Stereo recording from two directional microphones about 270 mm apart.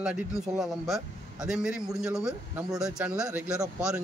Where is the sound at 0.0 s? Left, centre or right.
Centre.